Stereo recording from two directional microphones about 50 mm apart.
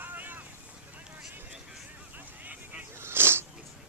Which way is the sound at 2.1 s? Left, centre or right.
Right.